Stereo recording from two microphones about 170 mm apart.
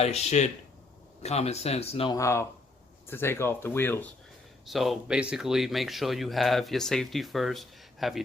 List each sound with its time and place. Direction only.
0.0 s speech: 40° left (ahead or behind)
2.1 s speech: 15° left (ahead or behind)
4.6 s speech: centre (ahead or behind)